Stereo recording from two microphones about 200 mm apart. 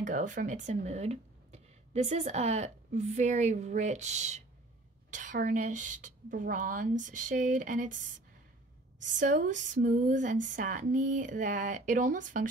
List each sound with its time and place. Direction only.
0.0 s a woman's voice: 40° right (ahead or behind)
9.0 s a woman's voice: 40° right (ahead or behind)